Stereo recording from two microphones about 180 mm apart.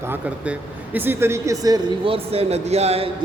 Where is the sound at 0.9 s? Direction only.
10° right (ahead or behind).